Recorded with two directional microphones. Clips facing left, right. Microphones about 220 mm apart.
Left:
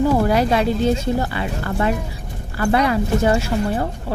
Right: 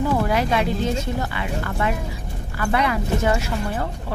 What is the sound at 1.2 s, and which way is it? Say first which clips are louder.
Speech: left 3 dB; 35° left (ahead or behind).